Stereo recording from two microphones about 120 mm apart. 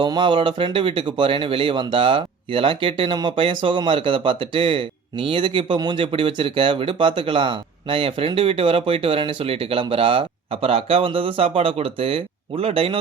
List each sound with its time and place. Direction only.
0.0 s speech: 40° right (ahead or behind)